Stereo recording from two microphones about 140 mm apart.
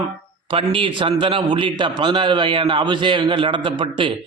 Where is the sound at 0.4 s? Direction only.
40° right (ahead or behind).